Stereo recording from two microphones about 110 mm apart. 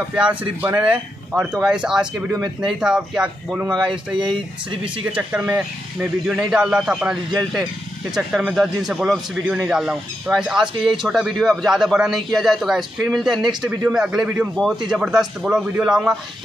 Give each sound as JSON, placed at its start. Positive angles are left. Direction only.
{"t": 0.1, "sound": "speech", "side_deg": -10}
{"t": 3.9, "sound": "speech", "side_deg": -45}
{"t": 4.8, "sound": "a man's voice", "side_deg": -10}